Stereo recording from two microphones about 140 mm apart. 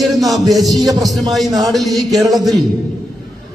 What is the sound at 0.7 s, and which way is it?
Music, 25° right (ahead or behind).